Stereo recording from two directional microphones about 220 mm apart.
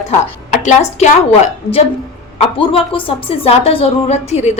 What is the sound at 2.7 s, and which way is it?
A woman's voice, 25° left (ahead or behind).